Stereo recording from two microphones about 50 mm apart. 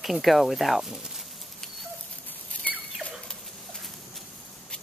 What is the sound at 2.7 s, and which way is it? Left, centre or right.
Rodents, left.